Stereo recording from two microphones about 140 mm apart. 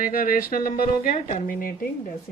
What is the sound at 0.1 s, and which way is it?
Speech, 90° left.